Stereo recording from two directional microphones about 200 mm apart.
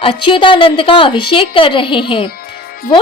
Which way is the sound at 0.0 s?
25° left (ahead or behind).